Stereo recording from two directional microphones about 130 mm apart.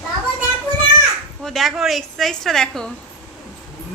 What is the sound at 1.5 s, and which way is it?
A woman's voice, centre (ahead or behind).